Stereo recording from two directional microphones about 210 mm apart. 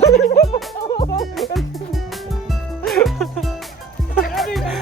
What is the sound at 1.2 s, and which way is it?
Music, centre (ahead or behind).